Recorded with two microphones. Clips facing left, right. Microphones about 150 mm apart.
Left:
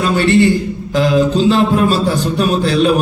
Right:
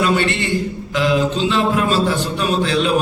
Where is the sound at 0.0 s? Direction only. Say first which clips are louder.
Left 6 dB; 35° left (ahead or behind).